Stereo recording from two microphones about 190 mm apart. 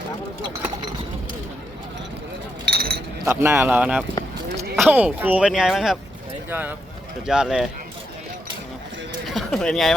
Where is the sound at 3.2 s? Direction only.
10° right (ahead or behind).